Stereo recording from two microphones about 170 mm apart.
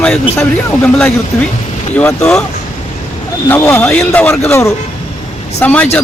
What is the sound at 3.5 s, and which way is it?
Speech, 15° left (ahead or behind).